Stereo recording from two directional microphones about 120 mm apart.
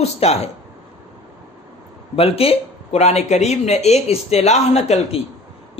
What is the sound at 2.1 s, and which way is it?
Speech, 55° left (ahead or behind).